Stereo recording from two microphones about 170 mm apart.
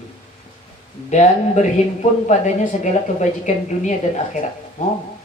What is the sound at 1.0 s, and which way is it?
Speech, 45° left (ahead or behind).